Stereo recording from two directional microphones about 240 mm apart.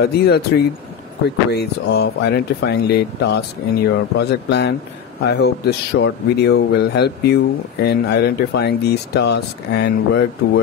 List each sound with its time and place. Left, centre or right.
0.0 s speech: left